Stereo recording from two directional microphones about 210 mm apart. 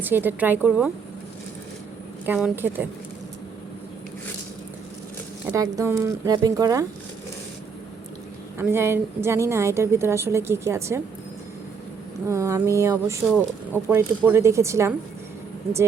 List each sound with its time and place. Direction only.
0.0 s a woman's voice: 10° right (ahead or behind)
2.2 s a woman's voice: 10° right (ahead or behind)
5.5 s a woman's voice: 15° right (ahead or behind)
8.5 s a woman's voice: 10° right (ahead or behind)
12.3 s a woman's voice: 15° right (ahead or behind)